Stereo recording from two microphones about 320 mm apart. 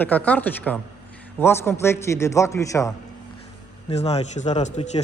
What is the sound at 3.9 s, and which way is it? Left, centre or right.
Speech, centre.